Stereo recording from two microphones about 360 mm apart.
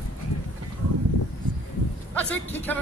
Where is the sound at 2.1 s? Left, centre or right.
Centre.